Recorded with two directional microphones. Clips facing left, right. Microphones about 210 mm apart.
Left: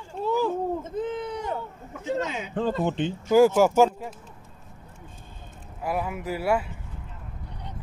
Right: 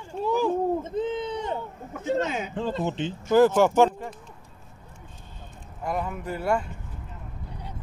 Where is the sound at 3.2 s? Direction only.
10° left (ahead or behind).